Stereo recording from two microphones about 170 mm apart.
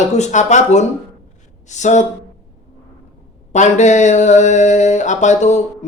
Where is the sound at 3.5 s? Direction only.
45° left (ahead or behind).